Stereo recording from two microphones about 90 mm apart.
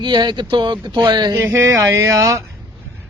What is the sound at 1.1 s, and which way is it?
Speech, 55° right (ahead or behind).